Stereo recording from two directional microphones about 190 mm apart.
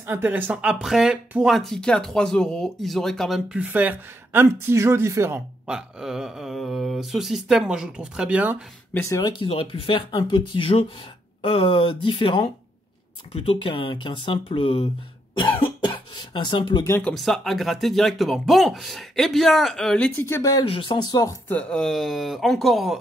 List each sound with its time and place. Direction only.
0.0 s speech: 10° right (ahead or behind)
8.9 s speech: 15° left (ahead or behind)
9.4 s speech: 30° left (ahead or behind)
15.3 s cough: 25° left (ahead or behind)
16.8 s speech: 10° left (ahead or behind)
17.1 s speech: centre (ahead or behind); by 21.4 s 20° left (ahead or behind)
21.5 s speech: 5° left (ahead or behind)